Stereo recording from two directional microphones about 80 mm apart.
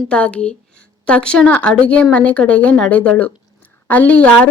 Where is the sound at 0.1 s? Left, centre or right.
Centre.